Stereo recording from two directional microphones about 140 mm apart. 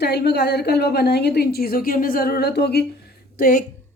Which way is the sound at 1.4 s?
90° left.